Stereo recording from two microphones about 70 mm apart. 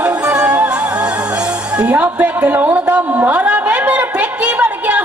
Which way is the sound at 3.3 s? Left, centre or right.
Centre.